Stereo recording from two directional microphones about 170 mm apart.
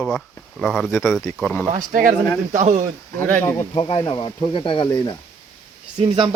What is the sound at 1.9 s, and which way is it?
Speech, 55° right (ahead or behind).